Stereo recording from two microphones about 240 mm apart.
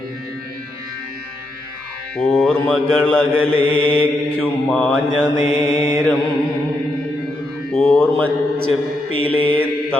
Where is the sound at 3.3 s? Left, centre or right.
Right.